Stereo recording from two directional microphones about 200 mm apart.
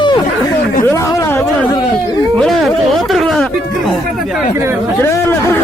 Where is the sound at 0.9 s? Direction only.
15° left (ahead or behind).